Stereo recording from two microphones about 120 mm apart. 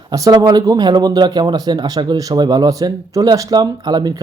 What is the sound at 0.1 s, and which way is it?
Speech, 30° right (ahead or behind).